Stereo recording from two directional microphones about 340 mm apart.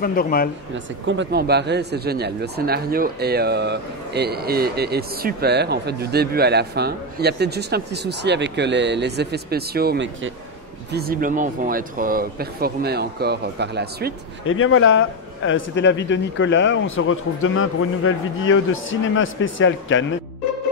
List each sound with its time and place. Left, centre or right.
0.0 s speech: left
1.0 s speech: right
14.4 s a man's voice: left